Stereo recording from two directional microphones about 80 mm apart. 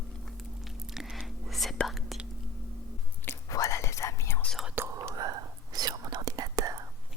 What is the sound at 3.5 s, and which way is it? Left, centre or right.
Whispering, left.